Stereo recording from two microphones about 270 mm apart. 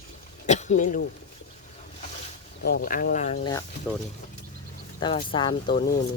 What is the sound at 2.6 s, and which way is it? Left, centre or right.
Speech, left.